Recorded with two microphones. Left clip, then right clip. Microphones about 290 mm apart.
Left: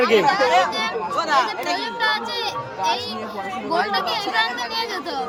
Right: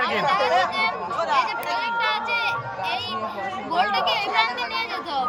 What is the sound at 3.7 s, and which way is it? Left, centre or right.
Speech, left.